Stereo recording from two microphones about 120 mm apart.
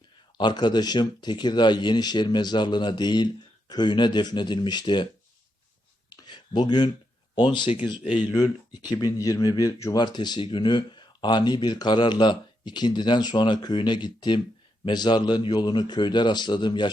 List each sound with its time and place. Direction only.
0.3 s speech: 40° left (ahead or behind)
6.1 s a sound: 40° left (ahead or behind)
7.3 s speech: 40° left (ahead or behind)